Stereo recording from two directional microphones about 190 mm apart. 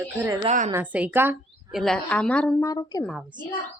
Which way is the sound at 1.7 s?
Centre (ahead or behind).